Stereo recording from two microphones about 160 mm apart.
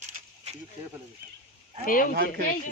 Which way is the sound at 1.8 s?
60° left (ahead or behind).